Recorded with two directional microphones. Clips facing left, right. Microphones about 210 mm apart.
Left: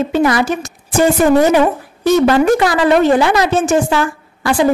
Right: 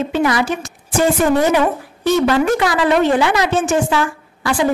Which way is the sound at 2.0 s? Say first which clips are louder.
Left 4 dB; 40° left (ahead or behind).